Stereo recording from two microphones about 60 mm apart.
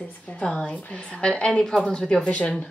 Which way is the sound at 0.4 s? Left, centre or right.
Centre.